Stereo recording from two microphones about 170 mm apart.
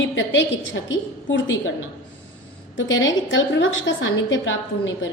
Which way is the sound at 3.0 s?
90° left.